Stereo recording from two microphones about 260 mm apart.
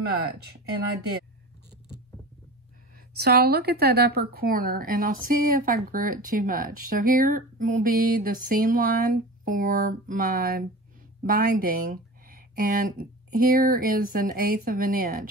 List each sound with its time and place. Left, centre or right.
3.2 s speech: right